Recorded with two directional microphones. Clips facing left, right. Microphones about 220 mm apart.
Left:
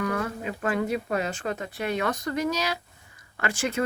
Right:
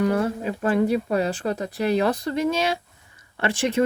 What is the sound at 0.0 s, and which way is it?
Speech, 30° right (ahead or behind).